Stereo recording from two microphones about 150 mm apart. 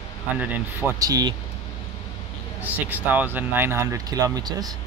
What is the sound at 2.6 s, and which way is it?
Speech, 10° right (ahead or behind).